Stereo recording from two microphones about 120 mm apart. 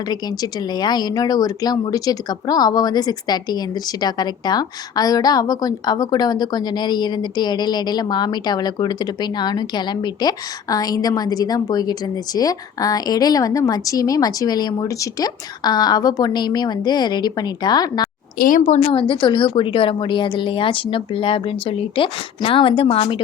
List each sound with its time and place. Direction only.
0.1 s a woman's voice: 35° left (ahead or behind)
18.6 s a woman's voice: 75° left (ahead or behind); by 23.2 s 50° left (ahead or behind)